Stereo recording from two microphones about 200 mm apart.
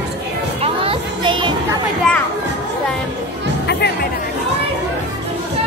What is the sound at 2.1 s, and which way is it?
Children playing, 5° left (ahead or behind).